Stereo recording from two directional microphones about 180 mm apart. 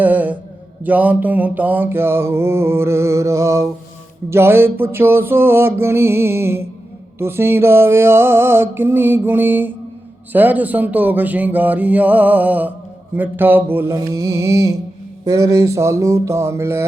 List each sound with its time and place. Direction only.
0.0 s mantra: 10° right (ahead or behind)